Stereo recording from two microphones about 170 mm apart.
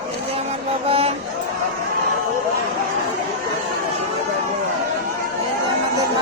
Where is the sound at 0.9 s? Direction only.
35° right (ahead or behind).